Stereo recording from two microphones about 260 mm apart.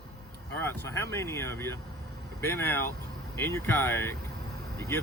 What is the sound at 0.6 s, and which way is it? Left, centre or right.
Speech, centre.